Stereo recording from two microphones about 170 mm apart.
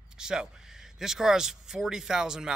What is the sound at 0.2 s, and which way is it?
Speech, 5° right (ahead or behind).